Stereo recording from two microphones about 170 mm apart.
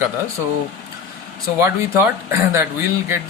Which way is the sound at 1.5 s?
15° right (ahead or behind).